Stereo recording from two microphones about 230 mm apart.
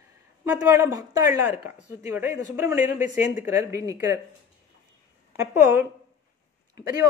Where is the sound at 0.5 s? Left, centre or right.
Centre.